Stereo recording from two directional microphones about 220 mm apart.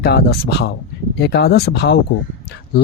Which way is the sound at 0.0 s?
45° left (ahead or behind).